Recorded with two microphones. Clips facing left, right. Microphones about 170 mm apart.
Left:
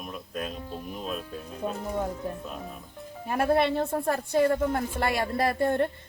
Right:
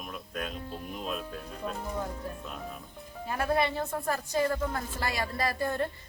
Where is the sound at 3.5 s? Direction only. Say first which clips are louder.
Left 3 dB; 60° left (ahead or behind).